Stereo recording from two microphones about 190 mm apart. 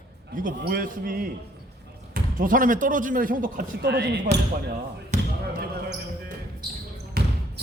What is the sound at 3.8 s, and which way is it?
Speech, 65° right (ahead or behind).